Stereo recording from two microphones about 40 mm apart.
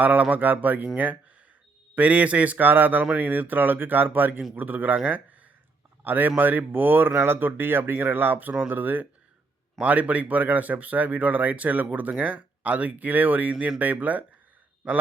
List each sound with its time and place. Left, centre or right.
0.0 s speech: right
2.6 s speech: right
8.4 s speech: right
9.8 s speech: right